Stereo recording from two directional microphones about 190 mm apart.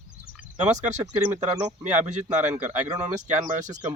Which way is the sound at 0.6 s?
40° right (ahead or behind).